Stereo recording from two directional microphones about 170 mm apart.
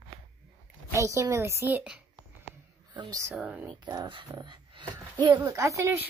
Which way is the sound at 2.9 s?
20° right (ahead or behind).